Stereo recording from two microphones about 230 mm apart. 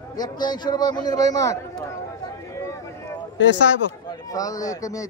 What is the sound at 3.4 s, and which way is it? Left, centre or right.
Speech, left.